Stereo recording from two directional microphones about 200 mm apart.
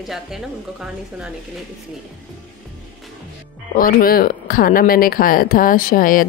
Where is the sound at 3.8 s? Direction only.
45° left (ahead or behind).